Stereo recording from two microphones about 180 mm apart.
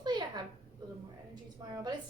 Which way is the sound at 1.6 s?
20° right (ahead or behind).